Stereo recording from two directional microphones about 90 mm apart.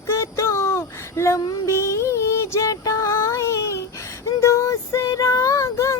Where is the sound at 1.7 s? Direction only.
30° left (ahead or behind).